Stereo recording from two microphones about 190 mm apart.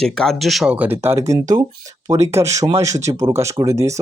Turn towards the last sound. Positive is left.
turn(degrees=-15)  # may be behind; listen again after turning